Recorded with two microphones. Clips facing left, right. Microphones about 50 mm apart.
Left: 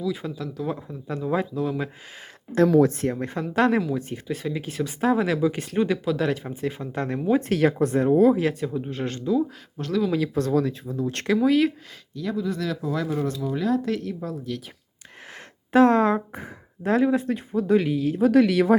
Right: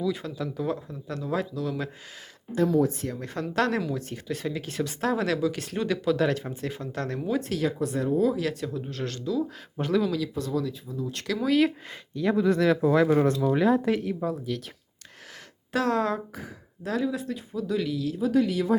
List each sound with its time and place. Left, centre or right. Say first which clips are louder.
0.3 s speech: even; centre
0.7 s speech: left 1 dB; centre
2.6 s speech: left 5 dB; left
3.1 s speech: left 7 dB; left
3.3 s speech: left 3 dB; centre
6.1 s speech: even; centre; by 9.4 s left
9.8 s a woman's voice: right 2 dB; centre
10.2 s speech: left 6 dB; left
11.3 s speech: left 2 dB; centre
12.1 s speech: right 4 dB; right
13.7 s a woman's voice: right 1 dB; right
15.7 s speech: left 8 dB; left
18.2 s speech: left 6 dB; left